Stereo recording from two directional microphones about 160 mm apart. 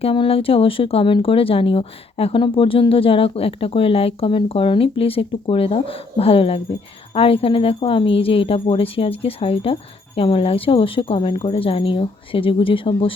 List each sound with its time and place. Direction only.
0.0 s speech: 35° left (ahead or behind)